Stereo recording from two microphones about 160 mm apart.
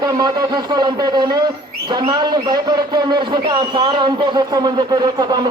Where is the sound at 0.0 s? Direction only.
25° right (ahead or behind).